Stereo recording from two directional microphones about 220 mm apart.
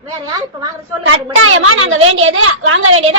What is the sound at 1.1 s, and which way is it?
A woman's voice, 65° right (ahead or behind).